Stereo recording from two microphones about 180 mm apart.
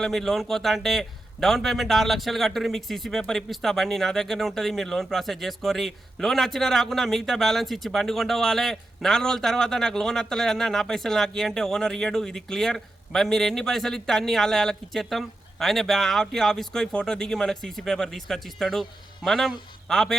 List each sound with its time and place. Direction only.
0.0 s speech: centre (ahead or behind)